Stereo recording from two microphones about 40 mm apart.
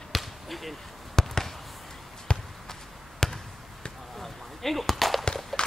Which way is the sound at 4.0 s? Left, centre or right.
Centre.